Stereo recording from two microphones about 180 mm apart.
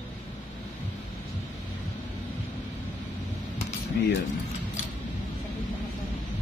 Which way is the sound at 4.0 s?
65° left (ahead or behind).